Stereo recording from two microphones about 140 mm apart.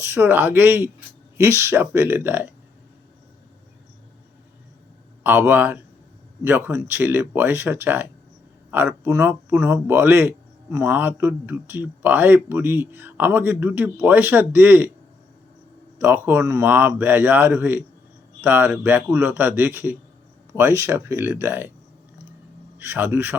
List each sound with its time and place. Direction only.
0.0 s speech: 15° right (ahead or behind)
5.2 s speech: 15° right (ahead or behind)
16.0 s speech: 15° right (ahead or behind)
22.8 s speech: 15° right (ahead or behind)